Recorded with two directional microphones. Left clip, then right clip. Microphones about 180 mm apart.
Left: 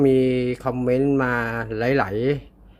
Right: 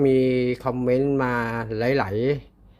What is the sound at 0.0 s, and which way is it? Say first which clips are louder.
Speech: left 1 dB; 10° right (ahead or behind).